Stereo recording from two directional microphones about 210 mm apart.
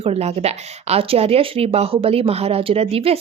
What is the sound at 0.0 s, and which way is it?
Speech, 30° right (ahead or behind).